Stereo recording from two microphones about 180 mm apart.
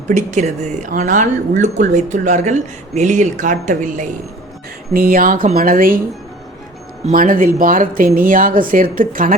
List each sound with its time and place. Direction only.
0.1 s speech: 40° right (ahead or behind)
7.0 s speech: 50° right (ahead or behind)